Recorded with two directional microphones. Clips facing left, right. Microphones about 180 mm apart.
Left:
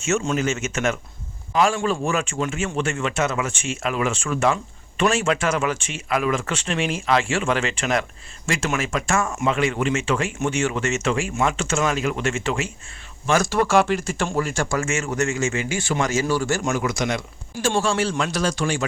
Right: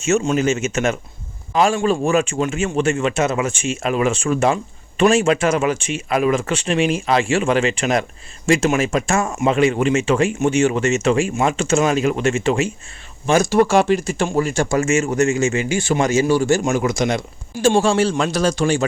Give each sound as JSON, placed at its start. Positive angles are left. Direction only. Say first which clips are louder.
{"t": 0.0, "sound": "speech", "louder": "right 5 dB", "side_deg": -20}